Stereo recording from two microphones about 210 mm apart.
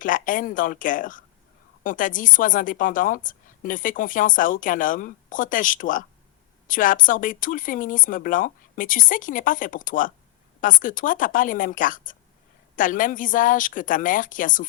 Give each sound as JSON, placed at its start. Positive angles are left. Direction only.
{"t": 0.0, "sound": "a woman's voice", "side_deg": 40}